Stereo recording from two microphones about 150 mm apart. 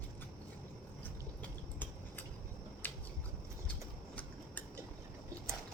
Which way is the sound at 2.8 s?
10° left (ahead or behind).